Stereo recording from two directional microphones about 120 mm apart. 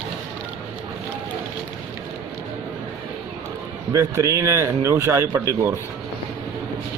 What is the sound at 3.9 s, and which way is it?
Speech, 25° right (ahead or behind).